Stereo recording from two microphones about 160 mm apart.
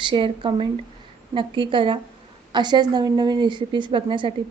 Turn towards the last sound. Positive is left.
turn(degrees=-30)  # may be behind; listen again after turning